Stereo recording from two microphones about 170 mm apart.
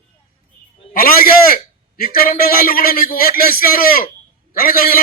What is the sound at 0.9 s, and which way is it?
A man's voice, 55° left (ahead or behind).